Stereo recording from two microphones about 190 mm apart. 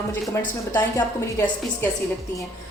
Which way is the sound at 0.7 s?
15° left (ahead or behind).